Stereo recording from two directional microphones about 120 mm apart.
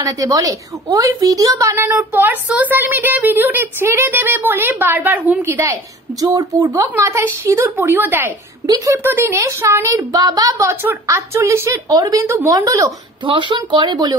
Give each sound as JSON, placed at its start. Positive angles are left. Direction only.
{"t": 0.0, "sound": "a child's voice", "side_deg": -30}
{"t": 1.8, "sound": "a child's voice", "side_deg": -15}
{"t": 8.6, "sound": "a child's voice", "side_deg": -30}
{"t": 13.2, "sound": "speech", "side_deg": -45}